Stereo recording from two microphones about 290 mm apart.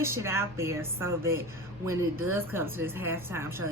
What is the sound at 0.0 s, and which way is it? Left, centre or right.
A woman's voice, centre.